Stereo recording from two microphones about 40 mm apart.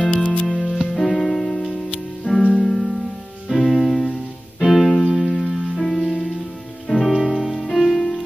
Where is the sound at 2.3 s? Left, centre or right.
Left.